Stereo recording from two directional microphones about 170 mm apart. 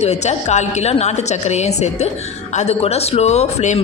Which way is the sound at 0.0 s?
40° left (ahead or behind).